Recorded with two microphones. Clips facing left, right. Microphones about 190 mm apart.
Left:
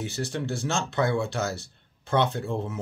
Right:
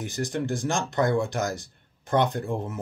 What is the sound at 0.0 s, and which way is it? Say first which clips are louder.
Speech: right 2 dB; 15° right (ahead or behind).